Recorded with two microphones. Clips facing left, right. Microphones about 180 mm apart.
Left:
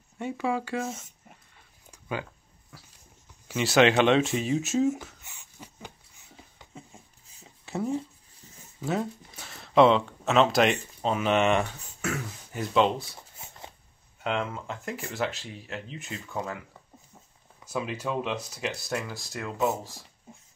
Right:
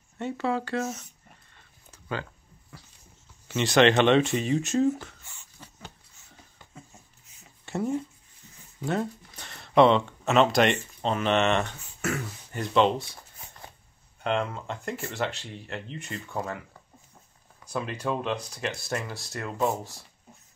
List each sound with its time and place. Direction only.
0.2 s speech: 10° left (ahead or behind)
1.9 s a sound: 10° left (ahead or behind)
2.7 s dog: centre (ahead or behind)
3.4 s speech: 5° left (ahead or behind)
5.2 s a sound: 15° left (ahead or behind)
7.6 s speech: centre (ahead or behind)
14.2 s speech: 5° left (ahead or behind)
17.6 s speech: 5° left (ahead or behind)